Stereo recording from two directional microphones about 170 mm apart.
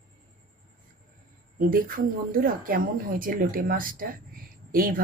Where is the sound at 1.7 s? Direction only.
55° right (ahead or behind).